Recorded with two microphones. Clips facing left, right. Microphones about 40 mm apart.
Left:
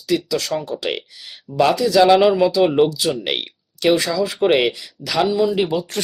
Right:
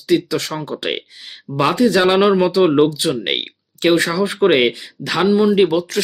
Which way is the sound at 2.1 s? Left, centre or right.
Centre.